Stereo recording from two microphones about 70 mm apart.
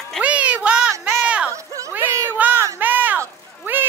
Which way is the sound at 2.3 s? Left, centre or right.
Right.